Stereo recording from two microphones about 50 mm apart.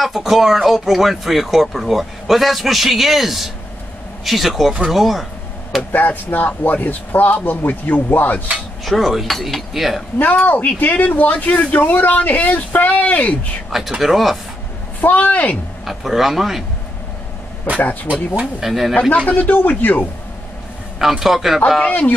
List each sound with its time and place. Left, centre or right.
0.0 s speech: centre
5.9 s speech: left
8.8 s speech: centre
10.1 s speech: left
13.7 s speech: centre
15.0 s speech: left
15.8 s speech: centre
18.0 s speech: right
18.6 s speech: centre
18.9 s speech: left
19.3 s speech: left
21.0 s a man's voice: centre
21.8 s speech: left